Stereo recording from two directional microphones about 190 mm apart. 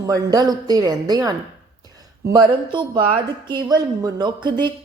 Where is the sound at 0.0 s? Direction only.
20° right (ahead or behind).